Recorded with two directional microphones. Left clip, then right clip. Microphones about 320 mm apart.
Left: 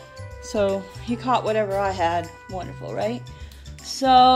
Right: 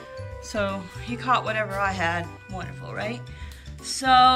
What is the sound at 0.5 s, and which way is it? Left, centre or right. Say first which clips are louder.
A woman's voice: left 5 dB; centre.